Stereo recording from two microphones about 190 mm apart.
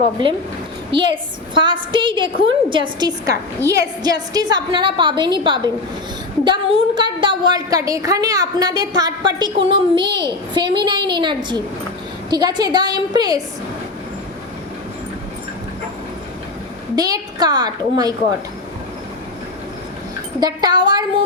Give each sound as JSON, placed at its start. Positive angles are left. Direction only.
{"t": 0.9, "sound": "a woman's voice", "side_deg": -25}
{"t": 16.9, "sound": "a woman's voice", "side_deg": -20}
{"t": 20.4, "sound": "a woman's voice", "side_deg": -20}